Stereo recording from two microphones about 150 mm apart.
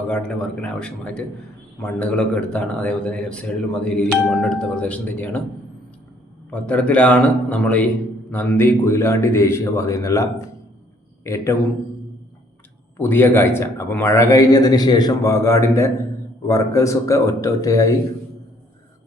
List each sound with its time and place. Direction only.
0.1 s a man's voice: 5° left (ahead or behind)
6.5 s a man's voice: 10° left (ahead or behind)
13.0 s a man's voice: 15° left (ahead or behind)